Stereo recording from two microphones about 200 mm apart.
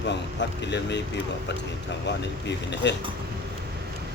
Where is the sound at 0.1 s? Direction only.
60° left (ahead or behind).